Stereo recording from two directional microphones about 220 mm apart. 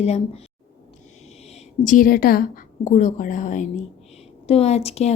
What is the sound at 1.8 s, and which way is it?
Speech, 35° left (ahead or behind).